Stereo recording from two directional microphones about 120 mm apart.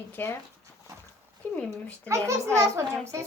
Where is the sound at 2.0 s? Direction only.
25° right (ahead or behind).